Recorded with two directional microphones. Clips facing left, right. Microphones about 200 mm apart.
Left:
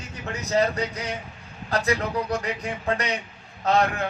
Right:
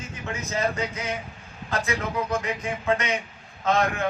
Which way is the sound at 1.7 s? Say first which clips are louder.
Left 3 dB; 35° left (ahead or behind).